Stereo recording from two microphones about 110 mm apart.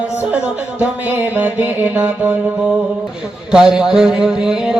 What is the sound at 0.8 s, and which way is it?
Music, 15° right (ahead or behind).